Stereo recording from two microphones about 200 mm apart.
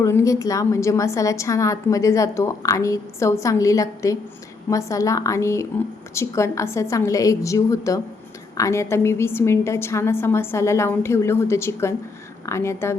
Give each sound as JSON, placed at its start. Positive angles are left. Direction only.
{"t": 0.0, "sound": "a woman's voice", "side_deg": 15}